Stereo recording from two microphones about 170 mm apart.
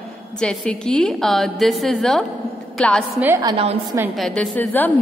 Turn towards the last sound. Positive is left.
turn(degrees=10)  # may be behind; listen again after turning